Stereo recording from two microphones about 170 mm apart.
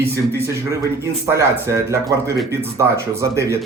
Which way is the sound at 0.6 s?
15° right (ahead or behind).